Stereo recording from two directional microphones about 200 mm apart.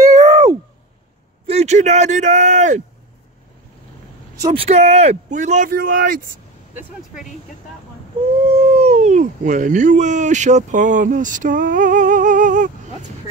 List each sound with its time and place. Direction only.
0.2 s a sound: 25° right (ahead or behind)
1.5 s a man's voice: 35° right (ahead or behind)
4.4 s speech: 20° right (ahead or behind)
4.6 s speech: 35° right (ahead or behind)
8.5 s speech: 30° right (ahead or behind)